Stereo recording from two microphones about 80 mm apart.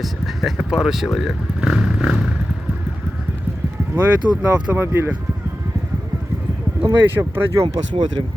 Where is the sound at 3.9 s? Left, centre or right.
Centre.